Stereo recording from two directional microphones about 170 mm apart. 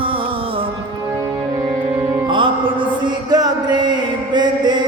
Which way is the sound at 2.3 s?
30° right (ahead or behind).